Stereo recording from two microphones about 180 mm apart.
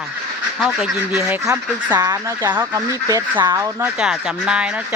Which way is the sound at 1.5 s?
20° right (ahead or behind).